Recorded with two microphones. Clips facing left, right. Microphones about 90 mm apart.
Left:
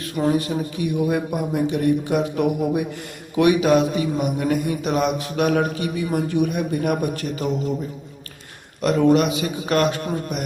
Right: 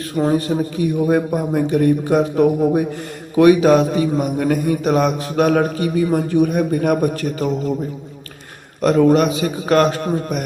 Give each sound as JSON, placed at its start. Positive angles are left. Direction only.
{"t": 0.2, "sound": "a man's voice", "side_deg": -35}
{"t": 8.8, "sound": "a man's voice", "side_deg": -40}